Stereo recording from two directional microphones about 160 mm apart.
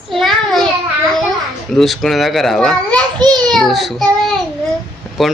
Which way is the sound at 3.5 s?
Centre (ahead or behind).